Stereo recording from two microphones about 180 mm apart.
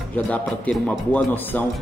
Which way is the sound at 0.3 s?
5° left (ahead or behind).